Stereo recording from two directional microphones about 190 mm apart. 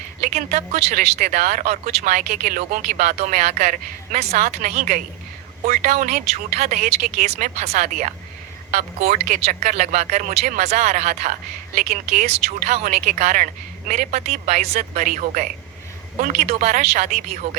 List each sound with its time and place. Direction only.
0.2 s speech: 40° right (ahead or behind)